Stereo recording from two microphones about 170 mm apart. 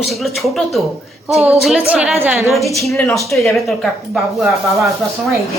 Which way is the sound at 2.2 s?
15° right (ahead or behind).